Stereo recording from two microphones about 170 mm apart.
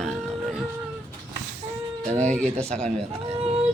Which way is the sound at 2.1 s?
45° right (ahead or behind).